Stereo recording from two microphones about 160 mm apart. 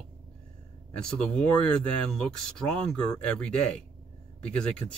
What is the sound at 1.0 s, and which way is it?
Speech, 5° left (ahead or behind).